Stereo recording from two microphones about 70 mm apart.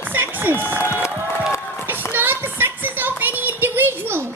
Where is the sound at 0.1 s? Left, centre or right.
Right.